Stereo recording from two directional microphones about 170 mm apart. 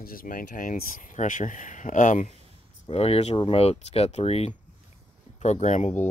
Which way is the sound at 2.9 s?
35° left (ahead or behind).